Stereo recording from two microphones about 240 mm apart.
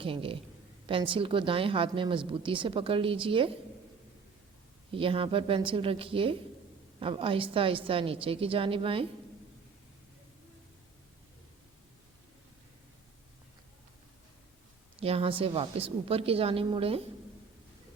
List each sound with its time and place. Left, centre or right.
0.0 s a woman's voice: right
4.9 s a woman's voice: right
15.0 s a woman's voice: right